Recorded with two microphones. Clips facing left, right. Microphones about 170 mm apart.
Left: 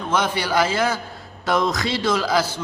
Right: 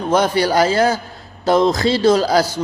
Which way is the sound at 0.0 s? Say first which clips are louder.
Right 7 dB; 40° right (ahead or behind).